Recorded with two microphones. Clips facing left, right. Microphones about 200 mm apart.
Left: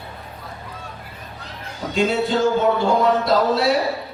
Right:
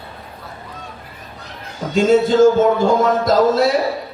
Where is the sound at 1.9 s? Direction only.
45° right (ahead or behind).